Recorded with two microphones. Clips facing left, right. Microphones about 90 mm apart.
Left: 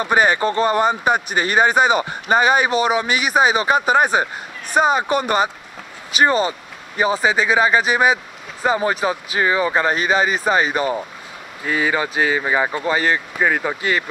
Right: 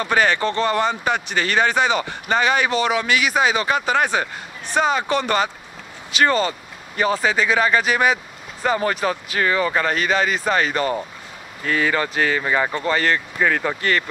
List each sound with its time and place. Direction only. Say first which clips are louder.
0.0 s speech: left 2 dB; 15° left (ahead or behind)